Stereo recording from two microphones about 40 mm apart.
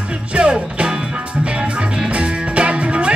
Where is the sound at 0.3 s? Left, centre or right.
Right.